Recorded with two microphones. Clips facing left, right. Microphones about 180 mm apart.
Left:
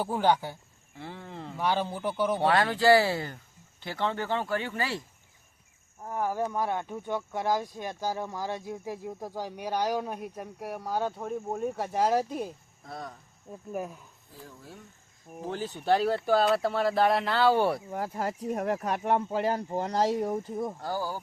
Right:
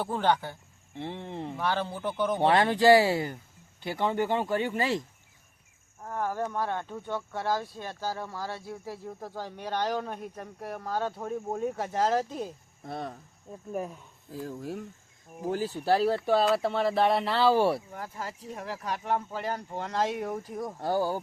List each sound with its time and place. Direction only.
0.0 s speech: 10° left (ahead or behind)
0.9 s speech: 25° right (ahead or behind)
1.5 s speech: 15° left (ahead or behind)
2.4 s speech: 20° right (ahead or behind)
6.0 s speech: 10° left (ahead or behind)
11.9 s speech: 15° left (ahead or behind)
12.8 s speech: 25° right (ahead or behind)
13.5 s speech: centre (ahead or behind)
14.6 s speech: 80° right
15.4 s speech: 10° right (ahead or behind)
17.9 s speech: 40° left (ahead or behind); by 20.7 s 25° left (ahead or behind)
20.8 s speech: 25° right (ahead or behind)